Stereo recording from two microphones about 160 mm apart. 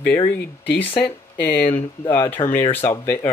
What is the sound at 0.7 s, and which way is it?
Speech, 10° left (ahead or behind).